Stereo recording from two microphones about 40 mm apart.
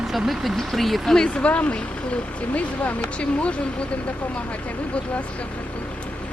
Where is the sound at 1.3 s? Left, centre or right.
Left.